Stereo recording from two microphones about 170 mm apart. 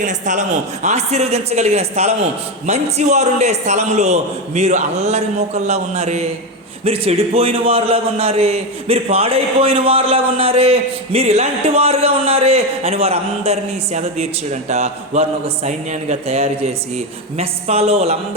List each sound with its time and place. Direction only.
0.0 s a man's voice: 45° right (ahead or behind)